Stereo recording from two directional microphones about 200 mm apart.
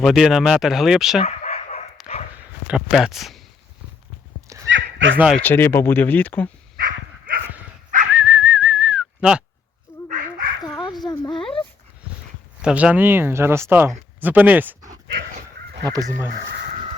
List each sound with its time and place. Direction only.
0.0 s speech: centre (ahead or behind)
1.2 s bow-wow: 30° left (ahead or behind)
2.0 s dog: centre (ahead or behind)
2.6 s speech: 5° right (ahead or behind)
4.4 s dog: 15° right (ahead or behind)
4.7 s a sound: 70° right (ahead or behind)
5.1 s speech: 5° right (ahead or behind)
5.4 s speech: 10° left (ahead or behind)
6.7 s dog: 45° right (ahead or behind)
8.1 s whistling: 5° right (ahead or behind)
10.1 s dog: 40° right (ahead or behind)
10.8 s speech: 20° left (ahead or behind)
12.6 s speech: 5° right (ahead or behind)
15.4 s crow: 50° right (ahead or behind)